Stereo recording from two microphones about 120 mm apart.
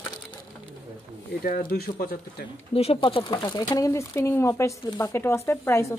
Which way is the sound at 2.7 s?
55° left (ahead or behind).